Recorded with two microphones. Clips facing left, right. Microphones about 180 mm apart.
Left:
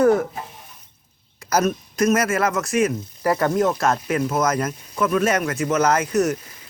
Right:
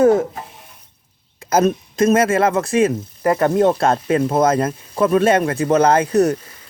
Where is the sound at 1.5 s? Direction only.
25° right (ahead or behind).